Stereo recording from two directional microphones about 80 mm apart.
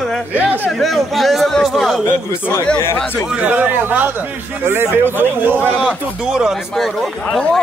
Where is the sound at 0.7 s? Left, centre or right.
Centre.